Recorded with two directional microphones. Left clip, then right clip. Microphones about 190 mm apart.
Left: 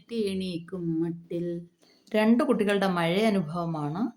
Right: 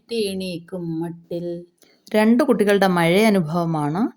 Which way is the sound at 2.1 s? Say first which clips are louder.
Right 7 dB; 30° right (ahead or behind).